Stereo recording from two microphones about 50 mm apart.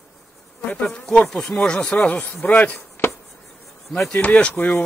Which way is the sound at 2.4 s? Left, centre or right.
Left.